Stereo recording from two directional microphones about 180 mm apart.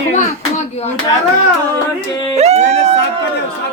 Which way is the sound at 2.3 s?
35° right (ahead or behind).